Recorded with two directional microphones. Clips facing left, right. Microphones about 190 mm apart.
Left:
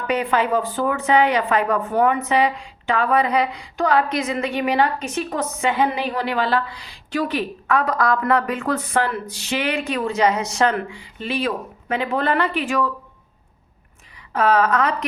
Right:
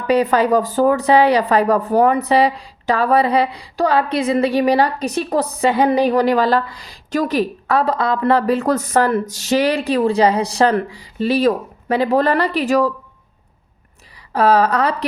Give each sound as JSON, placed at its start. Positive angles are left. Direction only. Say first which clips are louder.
{"t": 0.1, "sound": "speech", "louder": "right 6 dB", "side_deg": -40}
{"t": 14.2, "sound": "a woman's voice", "louder": "right 4 dB", "side_deg": -35}